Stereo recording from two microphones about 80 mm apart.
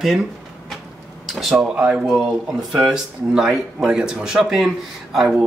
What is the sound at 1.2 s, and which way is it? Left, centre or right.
Speech, centre.